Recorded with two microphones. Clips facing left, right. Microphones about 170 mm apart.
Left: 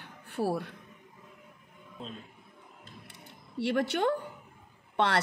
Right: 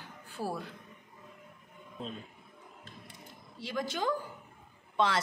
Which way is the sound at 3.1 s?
65° left (ahead or behind).